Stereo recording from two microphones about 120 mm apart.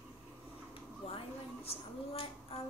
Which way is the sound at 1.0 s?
55° left (ahead or behind).